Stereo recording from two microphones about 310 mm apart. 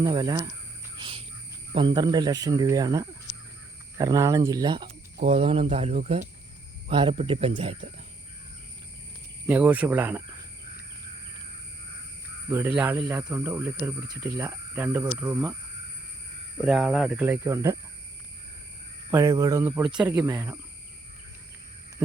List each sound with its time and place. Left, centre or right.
0.0 s speech: centre
0.9 s music: centre
1.7 s speech: centre
9.5 s speech: centre
12.5 s speech: centre
16.6 s speech: centre
19.1 s speech: centre